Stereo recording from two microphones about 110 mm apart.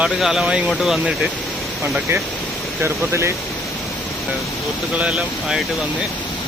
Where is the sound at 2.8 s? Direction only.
25° right (ahead or behind).